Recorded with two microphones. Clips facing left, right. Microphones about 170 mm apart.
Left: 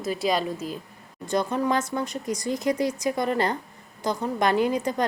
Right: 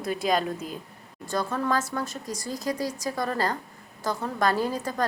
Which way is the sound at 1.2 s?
20° left (ahead or behind).